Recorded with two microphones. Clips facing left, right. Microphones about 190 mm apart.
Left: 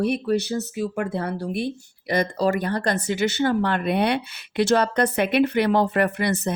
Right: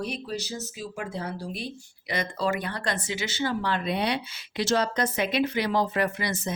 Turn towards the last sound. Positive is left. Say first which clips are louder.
# left 6 dB
turn(degrees=60)  # may be behind; listen again after turning